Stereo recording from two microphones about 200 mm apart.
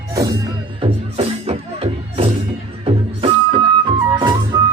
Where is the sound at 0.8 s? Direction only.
30° right (ahead or behind).